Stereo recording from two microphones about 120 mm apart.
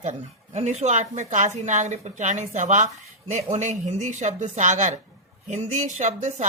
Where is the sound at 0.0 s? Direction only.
80° right.